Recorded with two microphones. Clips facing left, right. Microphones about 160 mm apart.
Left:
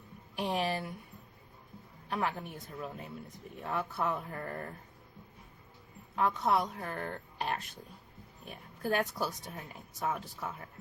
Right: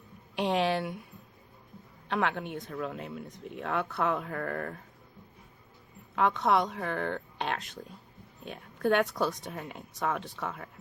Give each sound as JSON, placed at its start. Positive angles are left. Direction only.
{"t": 0.3, "sound": "speech", "side_deg": -90}
{"t": 2.0, "sound": "speech", "side_deg": -75}
{"t": 6.1, "sound": "a woman's voice", "side_deg": -85}
{"t": 9.1, "sound": "speech", "side_deg": -70}